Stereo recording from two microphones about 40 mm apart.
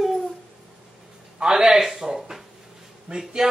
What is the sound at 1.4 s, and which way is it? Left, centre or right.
Speech, centre.